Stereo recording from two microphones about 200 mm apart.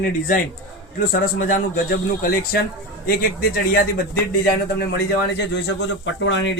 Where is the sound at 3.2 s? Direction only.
50° left (ahead or behind).